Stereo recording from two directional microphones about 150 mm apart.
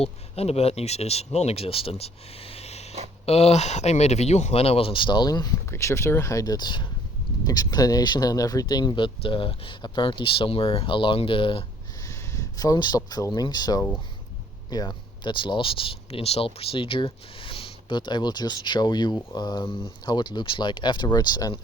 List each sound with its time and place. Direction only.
0.0 s speech: 40° left (ahead or behind)
12.0 s a sound: 20° left (ahead or behind)
13.1 s speech: 25° left (ahead or behind)